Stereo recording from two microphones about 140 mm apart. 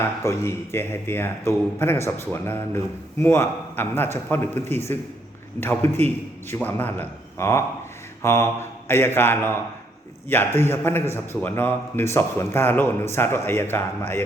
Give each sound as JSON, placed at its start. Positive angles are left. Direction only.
{"t": 0.0, "sound": "speech", "side_deg": 20}